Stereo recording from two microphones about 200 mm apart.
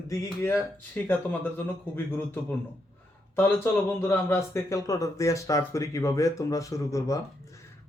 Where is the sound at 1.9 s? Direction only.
10° left (ahead or behind).